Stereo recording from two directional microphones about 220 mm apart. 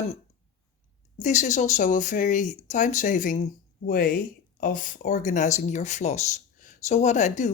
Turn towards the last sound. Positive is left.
turn(degrees=35)  # may be behind; listen again after turning